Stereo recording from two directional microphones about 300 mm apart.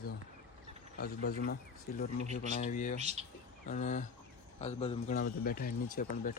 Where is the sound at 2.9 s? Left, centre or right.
Right.